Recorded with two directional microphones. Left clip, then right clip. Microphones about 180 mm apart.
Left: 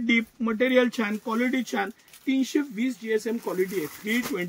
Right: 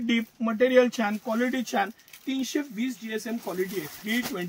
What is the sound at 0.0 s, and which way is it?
Speech, 40° right (ahead or behind).